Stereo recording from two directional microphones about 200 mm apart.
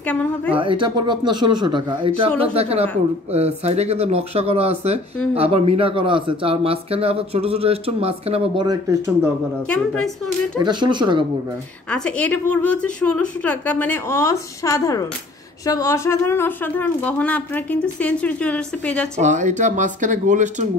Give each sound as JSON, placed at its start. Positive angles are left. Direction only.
{"t": 0.6, "sound": "speech", "side_deg": -25}
{"t": 9.7, "sound": "a woman's voice", "side_deg": 5}
{"t": 10.6, "sound": "speech", "side_deg": -20}
{"t": 11.9, "sound": "speech", "side_deg": 5}
{"t": 19.1, "sound": "speech", "side_deg": -35}